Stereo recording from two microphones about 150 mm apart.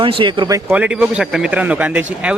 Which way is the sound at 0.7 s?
10° right (ahead or behind).